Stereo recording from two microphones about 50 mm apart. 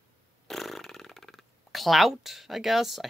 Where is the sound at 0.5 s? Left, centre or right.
Centre.